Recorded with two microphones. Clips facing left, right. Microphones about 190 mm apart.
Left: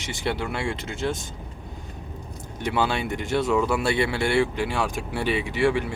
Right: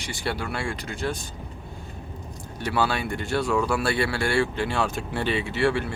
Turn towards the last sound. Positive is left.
turn(degrees=15)  # may be behind; listen again after turning